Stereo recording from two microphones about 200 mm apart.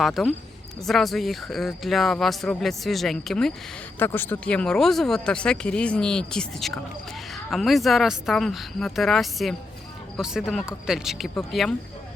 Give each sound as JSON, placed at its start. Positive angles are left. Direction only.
{"t": 0.0, "sound": "speech", "side_deg": 0}